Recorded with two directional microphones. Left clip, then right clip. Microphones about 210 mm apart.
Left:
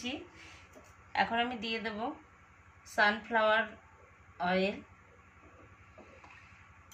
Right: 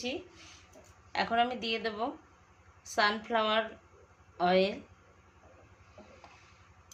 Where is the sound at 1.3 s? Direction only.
50° right (ahead or behind).